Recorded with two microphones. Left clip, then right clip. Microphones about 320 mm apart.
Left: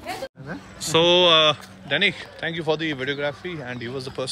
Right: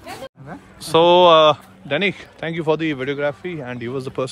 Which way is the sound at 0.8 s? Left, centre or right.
Centre.